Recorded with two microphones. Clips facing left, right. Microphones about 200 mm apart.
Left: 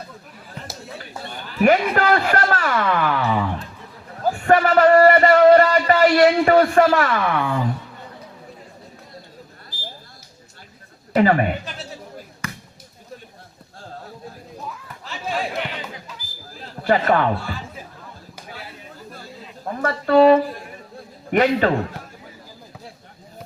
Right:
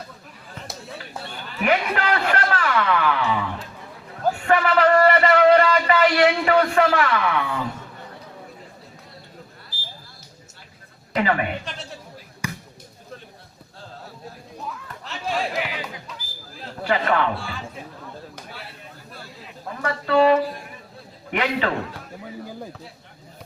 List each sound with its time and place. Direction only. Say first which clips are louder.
0.6 s a sound: even; centre (ahead or behind)
1.3 s a sound: left 6 dB; 40° left (ahead or behind)
4.4 s speech: left 4 dB; 45° left (ahead or behind)
11.1 s speech: left 6 dB; 40° left (ahead or behind)
12.4 s basketball bounce: right 2 dB; 15° right (ahead or behind)
15.0 s music: even; centre (ahead or behind)
16.8 s a man's voice: left 4 dB; 45° left (ahead or behind)
19.6 s a man's voice: left 4 dB; 45° left (ahead or behind)